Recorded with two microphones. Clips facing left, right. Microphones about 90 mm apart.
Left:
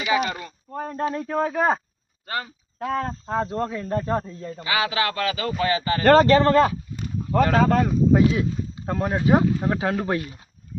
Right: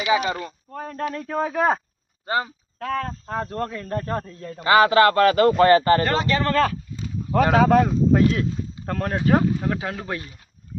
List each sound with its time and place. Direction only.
0.1 s speech: 20° right (ahead or behind)
0.7 s speech: 20° left (ahead or behind)
1.2 s speech: centre (ahead or behind)
2.2 s speech: 25° right (ahead or behind)
2.7 s speech: 20° left (ahead or behind)
4.6 s speech: 50° right (ahead or behind)
6.1 s speech: 40° left (ahead or behind)
6.4 s speech: 20° left (ahead or behind)
7.4 s speech: 10° right (ahead or behind); by 10.3 s 25° left (ahead or behind)